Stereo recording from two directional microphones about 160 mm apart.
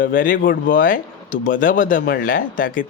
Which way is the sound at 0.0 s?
60° left (ahead or behind).